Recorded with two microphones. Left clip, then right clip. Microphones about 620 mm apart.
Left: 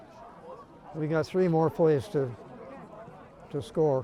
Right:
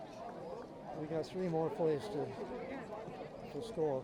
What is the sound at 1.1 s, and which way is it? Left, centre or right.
Speech, left.